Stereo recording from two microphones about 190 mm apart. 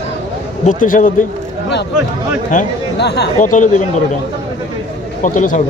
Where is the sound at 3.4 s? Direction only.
40° left (ahead or behind).